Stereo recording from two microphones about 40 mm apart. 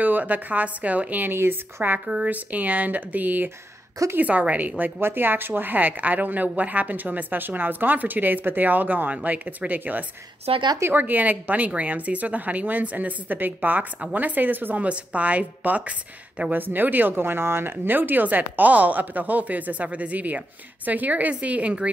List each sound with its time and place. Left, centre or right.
0.0 s speech: right
1.2 s speech: right
2.2 s speech: right
5.0 s speech: right
14.8 s speech: right
16.5 s speech: right